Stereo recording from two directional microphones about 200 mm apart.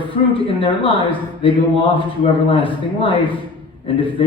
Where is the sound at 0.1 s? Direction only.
25° left (ahead or behind).